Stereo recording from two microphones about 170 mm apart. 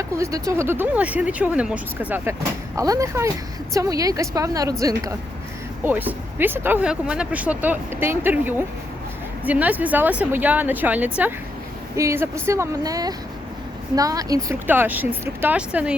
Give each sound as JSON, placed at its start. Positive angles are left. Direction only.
{"t": 0.2, "sound": "a woman's voice", "side_deg": -20}